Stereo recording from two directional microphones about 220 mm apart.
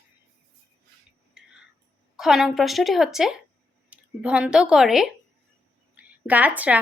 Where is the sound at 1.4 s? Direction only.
5° right (ahead or behind).